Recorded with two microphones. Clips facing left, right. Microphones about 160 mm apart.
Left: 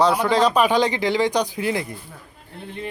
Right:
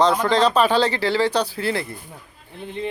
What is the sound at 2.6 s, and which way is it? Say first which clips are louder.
Speech: right 4 dB; 20° right (ahead or behind).